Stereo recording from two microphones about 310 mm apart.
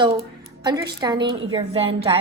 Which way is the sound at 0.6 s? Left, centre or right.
Centre.